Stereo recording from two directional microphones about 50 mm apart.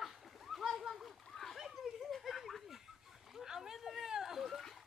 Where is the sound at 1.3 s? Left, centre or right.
Centre.